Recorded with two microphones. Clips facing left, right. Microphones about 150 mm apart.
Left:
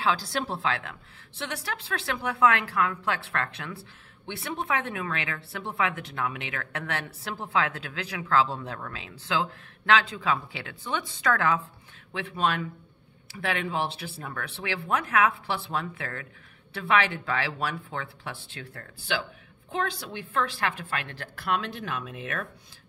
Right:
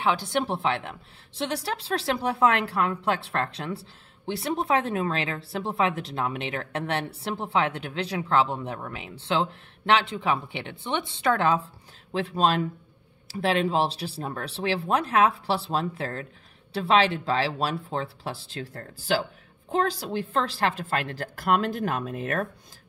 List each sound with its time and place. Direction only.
0.0 s a woman's voice: 25° right (ahead or behind); by 22.5 s 40° right (ahead or behind)